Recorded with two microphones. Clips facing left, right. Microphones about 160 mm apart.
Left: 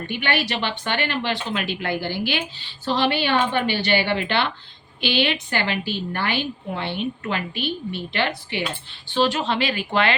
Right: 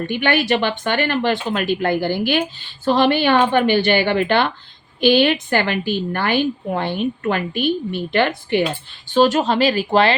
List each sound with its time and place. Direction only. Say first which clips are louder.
0.1 s speech: right 6 dB; 45° right (ahead or behind)